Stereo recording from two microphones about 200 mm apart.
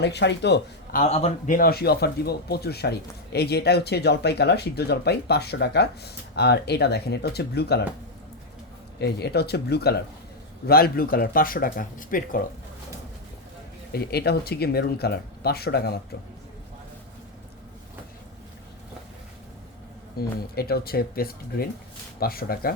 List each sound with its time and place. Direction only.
0.0 s speech: 60° left (ahead or behind)
0.9 s speech: 35° left (ahead or behind); by 7.9 s 55° left (ahead or behind)
9.0 s speech: 55° left (ahead or behind)
13.9 s speech: 50° left (ahead or behind)
20.6 s speech: 50° left (ahead or behind)